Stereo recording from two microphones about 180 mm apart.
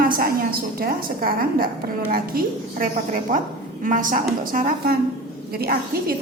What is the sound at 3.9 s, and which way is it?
A woman's voice, 50° right (ahead or behind).